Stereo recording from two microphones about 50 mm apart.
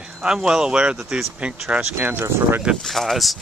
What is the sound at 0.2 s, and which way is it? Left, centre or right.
Speech, centre.